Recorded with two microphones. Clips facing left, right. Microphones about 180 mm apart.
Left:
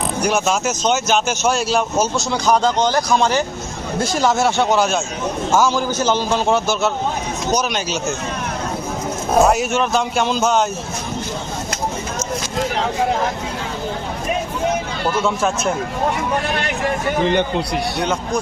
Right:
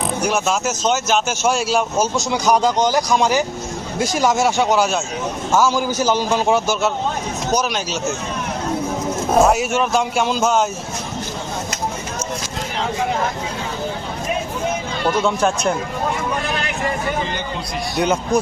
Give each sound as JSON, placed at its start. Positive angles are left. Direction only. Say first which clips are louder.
{"t": 0.2, "sound": "speech", "louder": "left 2 dB", "side_deg": 0}
{"t": 6.0, "sound": "speech", "louder": "even", "side_deg": -10}
{"t": 9.3, "sound": "speech", "louder": "even", "side_deg": -5}
{"t": 15.4, "sound": "speech", "louder": "right 1 dB", "side_deg": 0}